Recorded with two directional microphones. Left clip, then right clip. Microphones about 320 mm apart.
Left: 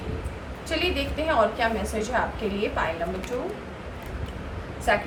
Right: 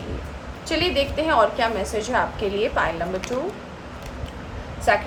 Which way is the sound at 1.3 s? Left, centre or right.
Right.